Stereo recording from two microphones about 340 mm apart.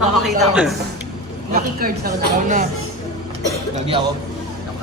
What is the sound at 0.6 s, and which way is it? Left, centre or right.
Speech, centre.